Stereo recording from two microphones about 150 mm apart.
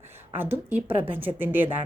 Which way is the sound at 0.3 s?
15° right (ahead or behind).